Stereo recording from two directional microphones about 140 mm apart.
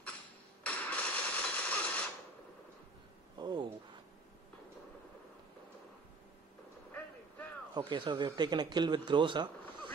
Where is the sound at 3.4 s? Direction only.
30° right (ahead or behind).